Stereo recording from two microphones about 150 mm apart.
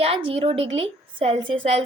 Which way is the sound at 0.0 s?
40° right (ahead or behind).